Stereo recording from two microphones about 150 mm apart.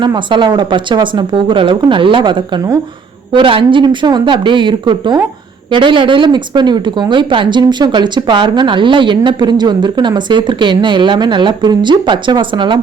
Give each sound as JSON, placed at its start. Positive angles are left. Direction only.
{"t": 0.0, "sound": "speech", "side_deg": -30}